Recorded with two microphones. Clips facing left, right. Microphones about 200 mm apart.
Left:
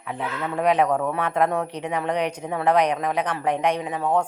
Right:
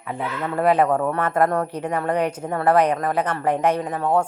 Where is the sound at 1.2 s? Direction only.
5° right (ahead or behind).